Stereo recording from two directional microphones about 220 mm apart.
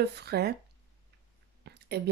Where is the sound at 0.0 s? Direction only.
50° right (ahead or behind).